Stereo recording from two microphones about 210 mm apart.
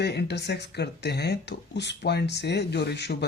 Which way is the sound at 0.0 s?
55° left (ahead or behind).